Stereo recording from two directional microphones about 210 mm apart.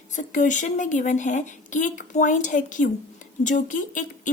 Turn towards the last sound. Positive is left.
turn(degrees=35)  # may be behind; listen again after turning